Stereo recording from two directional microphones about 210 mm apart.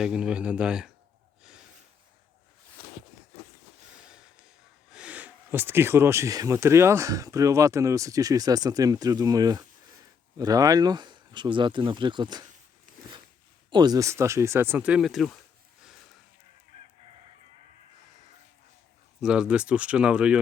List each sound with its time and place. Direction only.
0.0 s speech: 5° right (ahead or behind)
4.9 s speech: 5° right (ahead or behind); by 12.5 s 20° right (ahead or behind)
13.7 s speech: 20° right (ahead or behind); by 15.4 s centre (ahead or behind)
19.2 s speech: 5° right (ahead or behind)